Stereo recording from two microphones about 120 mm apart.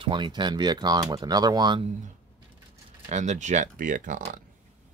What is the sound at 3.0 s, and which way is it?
Speech, 80° right.